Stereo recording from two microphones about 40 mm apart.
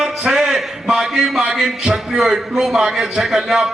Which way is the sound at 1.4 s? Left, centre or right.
Centre.